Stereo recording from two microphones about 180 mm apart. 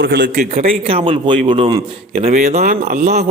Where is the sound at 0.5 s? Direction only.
35° right (ahead or behind).